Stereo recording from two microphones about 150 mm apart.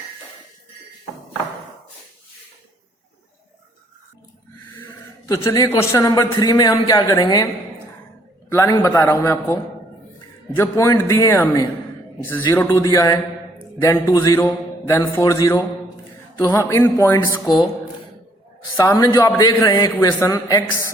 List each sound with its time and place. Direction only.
4.7 s a man's voice: 15° left (ahead or behind)
8.5 s a man's voice: 20° left (ahead or behind)
14.3 s mantra: 15° left (ahead or behind)
15.1 s a man's voice: 25° left (ahead or behind)
18.8 s a man's voice: 25° left (ahead or behind)